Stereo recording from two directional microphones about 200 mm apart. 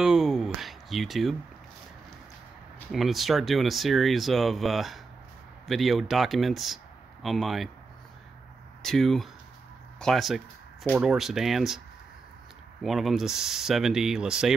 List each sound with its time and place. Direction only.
0.0 s a sound: centre (ahead or behind)
2.9 s speech: centre (ahead or behind)
8.8 s speech: centre (ahead or behind)
12.8 s speech: centre (ahead or behind)